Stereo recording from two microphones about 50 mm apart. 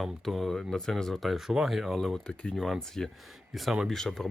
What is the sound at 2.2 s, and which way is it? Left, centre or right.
Speech, centre.